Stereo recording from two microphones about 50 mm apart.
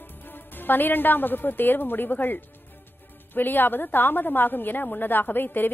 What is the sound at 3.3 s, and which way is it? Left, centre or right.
A woman's voice, left.